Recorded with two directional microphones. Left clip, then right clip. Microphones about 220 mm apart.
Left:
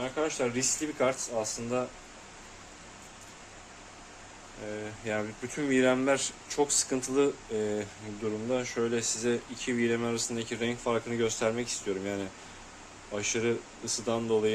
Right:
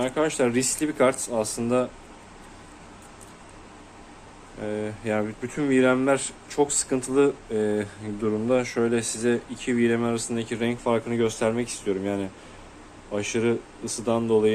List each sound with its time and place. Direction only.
0.0 s speech: 35° right (ahead or behind)
4.7 s speech: 25° right (ahead or behind)
5.1 s speech: 10° right (ahead or behind)